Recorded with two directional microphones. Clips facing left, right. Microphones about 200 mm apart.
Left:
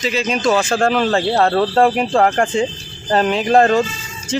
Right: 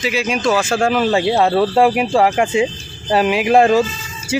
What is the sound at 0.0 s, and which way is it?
Speech, 10° right (ahead or behind).